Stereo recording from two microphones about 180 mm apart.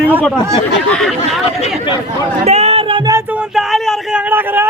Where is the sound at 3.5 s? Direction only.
Centre (ahead or behind).